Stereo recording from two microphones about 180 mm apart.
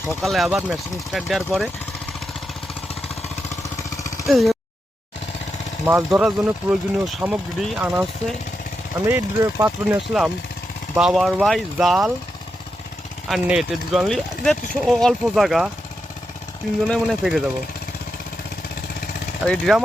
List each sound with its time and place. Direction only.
0.2 s speech: centre (ahead or behind)
3.6 s vehicle: 15° left (ahead or behind)
4.3 s speech: centre (ahead or behind)
5.8 s speech: 5° right (ahead or behind)
9.0 s speech: 15° right (ahead or behind)
13.2 s speech: centre (ahead or behind)
16.8 s speech: centre (ahead or behind)
19.5 s speech: centre (ahead or behind)